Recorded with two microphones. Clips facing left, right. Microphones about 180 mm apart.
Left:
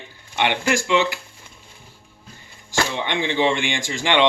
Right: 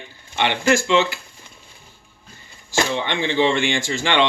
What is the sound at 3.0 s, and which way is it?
Speech, 15° left (ahead or behind).